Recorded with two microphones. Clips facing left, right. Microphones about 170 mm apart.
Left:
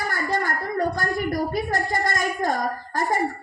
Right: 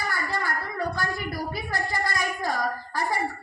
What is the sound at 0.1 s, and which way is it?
A woman's voice, 45° left (ahead or behind).